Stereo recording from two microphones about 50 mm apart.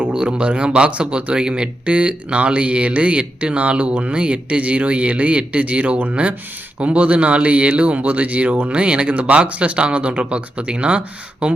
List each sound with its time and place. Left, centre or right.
0.1 s speech: centre